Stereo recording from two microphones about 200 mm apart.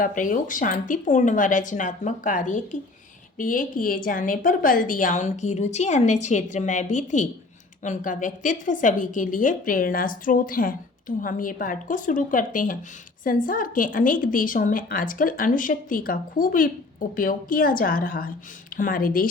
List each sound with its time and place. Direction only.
0.0 s a woman's voice: 40° left (ahead or behind)